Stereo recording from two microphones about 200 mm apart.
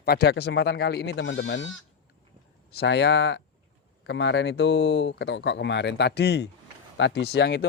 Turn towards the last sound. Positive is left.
turn(degrees=55)  # may be behind; listen again after turning